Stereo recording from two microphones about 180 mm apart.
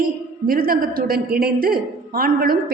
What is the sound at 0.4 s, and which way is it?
A woman's voice, 55° right (ahead or behind).